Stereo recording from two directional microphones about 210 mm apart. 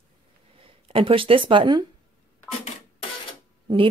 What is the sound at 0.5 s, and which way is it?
Speech, 25° right (ahead or behind).